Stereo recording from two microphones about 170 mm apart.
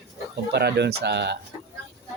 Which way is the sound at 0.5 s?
75° right (ahead or behind).